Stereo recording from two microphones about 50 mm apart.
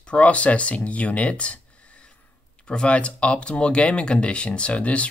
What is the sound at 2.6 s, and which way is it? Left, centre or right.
Speech, left.